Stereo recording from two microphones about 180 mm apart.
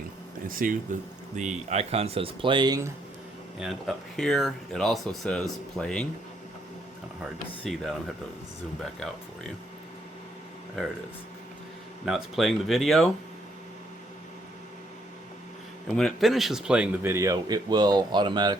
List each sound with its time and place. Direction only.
0.4 s speech: 50° right (ahead or behind)
1.4 s speech: 40° right (ahead or behind); by 2.9 s 20° right (ahead or behind)
3.6 s speech: centre (ahead or behind)
7.6 s speech: centre (ahead or behind)
12.0 s speech: centre (ahead or behind)
16.0 s speech: centre (ahead or behind); by 18.5 s 25° right (ahead or behind)